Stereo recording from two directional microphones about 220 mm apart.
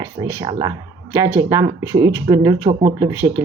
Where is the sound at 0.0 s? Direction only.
10° right (ahead or behind).